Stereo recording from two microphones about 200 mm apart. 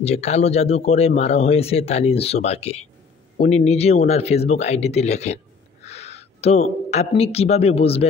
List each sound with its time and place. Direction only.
0.0 s speech: 30° left (ahead or behind)